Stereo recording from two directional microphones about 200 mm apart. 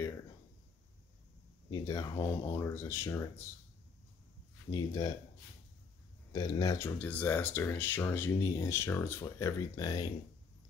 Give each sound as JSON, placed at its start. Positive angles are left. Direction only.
{"t": 1.7, "sound": "speech", "side_deg": 15}
{"t": 4.6, "sound": "speech", "side_deg": 20}
{"t": 6.3, "sound": "speech", "side_deg": 20}